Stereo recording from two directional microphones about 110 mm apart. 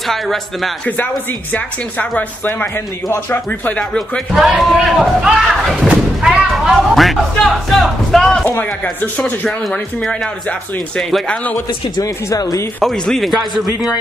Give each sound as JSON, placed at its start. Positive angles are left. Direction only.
{"t": 0.1, "sound": "speech", "side_deg": 5}
{"t": 0.8, "sound": "speech", "side_deg": 15}
{"t": 4.3, "sound": "speech", "side_deg": -5}
{"t": 12.0, "sound": "speech", "side_deg": 30}
{"t": 12.8, "sound": "speech", "side_deg": 5}